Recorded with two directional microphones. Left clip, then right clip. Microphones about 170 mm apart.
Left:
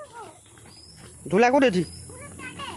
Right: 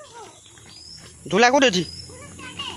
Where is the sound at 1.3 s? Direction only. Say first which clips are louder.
Right 3 dB; 15° left (ahead or behind).